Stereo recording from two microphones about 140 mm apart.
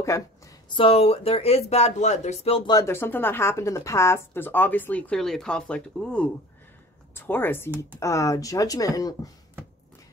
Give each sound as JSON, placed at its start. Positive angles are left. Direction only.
{"t": 0.0, "sound": "a sound", "side_deg": 20}
{"t": 0.7, "sound": "speech", "side_deg": 40}
{"t": 2.7, "sound": "speech", "side_deg": 20}